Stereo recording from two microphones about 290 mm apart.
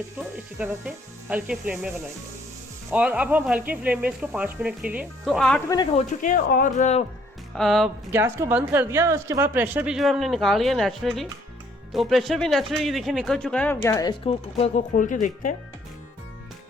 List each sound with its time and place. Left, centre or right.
0.6 s a woman's voice: centre
2.9 s a woman's voice: centre
6.1 s speech: left
7.5 s a woman's voice: centre; by 15.5 s left